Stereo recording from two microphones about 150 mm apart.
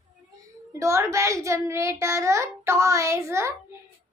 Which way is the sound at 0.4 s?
20° right (ahead or behind).